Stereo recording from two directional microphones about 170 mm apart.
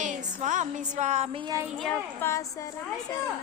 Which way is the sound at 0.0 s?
45° right (ahead or behind).